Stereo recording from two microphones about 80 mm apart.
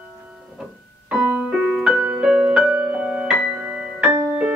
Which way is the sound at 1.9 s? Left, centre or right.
Centre.